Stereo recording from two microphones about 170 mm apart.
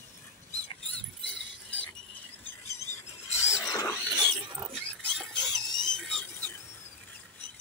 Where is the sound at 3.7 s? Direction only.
20° left (ahead or behind).